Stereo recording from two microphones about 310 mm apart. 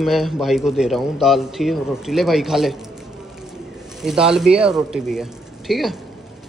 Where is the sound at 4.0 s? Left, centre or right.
Centre.